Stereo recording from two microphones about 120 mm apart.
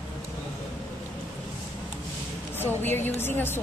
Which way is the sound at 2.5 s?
15° left (ahead or behind).